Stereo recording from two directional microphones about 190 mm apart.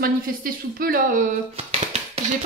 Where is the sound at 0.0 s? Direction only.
50° right (ahead or behind).